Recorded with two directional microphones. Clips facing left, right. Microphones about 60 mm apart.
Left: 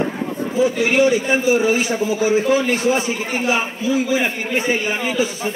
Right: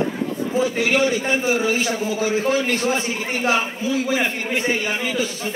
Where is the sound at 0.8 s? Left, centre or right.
Left.